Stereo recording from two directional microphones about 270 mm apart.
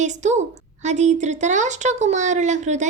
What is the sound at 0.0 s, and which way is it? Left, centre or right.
Speech, right.